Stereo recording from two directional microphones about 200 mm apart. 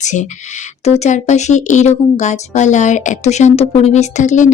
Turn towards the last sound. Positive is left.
turn(degrees=40)  # may be behind; listen again after turning